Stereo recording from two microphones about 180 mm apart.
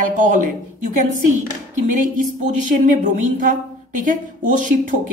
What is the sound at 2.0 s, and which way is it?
Speech, 45° right (ahead or behind).